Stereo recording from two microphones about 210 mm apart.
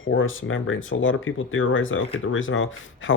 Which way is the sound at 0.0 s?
70° left (ahead or behind).